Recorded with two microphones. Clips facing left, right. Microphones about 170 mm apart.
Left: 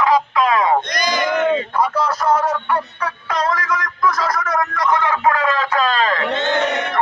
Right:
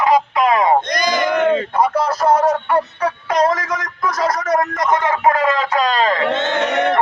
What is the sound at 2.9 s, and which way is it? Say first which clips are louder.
Music: right 5 dB; 40° right (ahead or behind).